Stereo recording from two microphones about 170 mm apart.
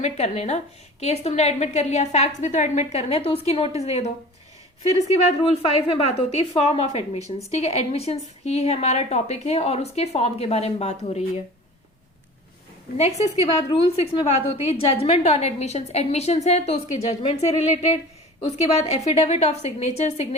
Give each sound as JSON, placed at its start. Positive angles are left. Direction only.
{"t": 0.0, "sound": "a woman's voice", "side_deg": 40}
{"t": 13.0, "sound": "a woman's voice", "side_deg": 40}
{"t": 18.4, "sound": "a woman's voice", "side_deg": 40}